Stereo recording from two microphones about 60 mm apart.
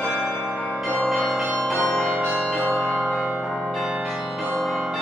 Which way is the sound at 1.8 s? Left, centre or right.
Centre.